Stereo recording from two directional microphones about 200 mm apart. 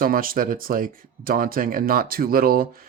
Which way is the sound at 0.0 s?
45° right (ahead or behind).